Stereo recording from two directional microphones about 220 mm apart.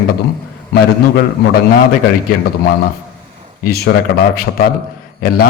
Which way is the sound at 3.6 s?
45° left (ahead or behind).